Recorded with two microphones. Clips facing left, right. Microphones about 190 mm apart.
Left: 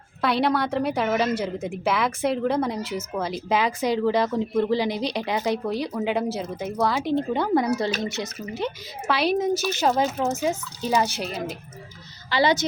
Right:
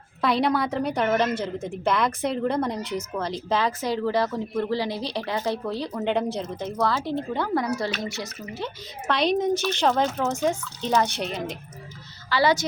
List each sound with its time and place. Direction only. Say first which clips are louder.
0.2 s a woman's voice: even; centre (ahead or behind); by 8.7 s 20° left (ahead or behind)
9.0 s speech: even; 5° left (ahead or behind)
12.3 s speech: even; 20° left (ahead or behind)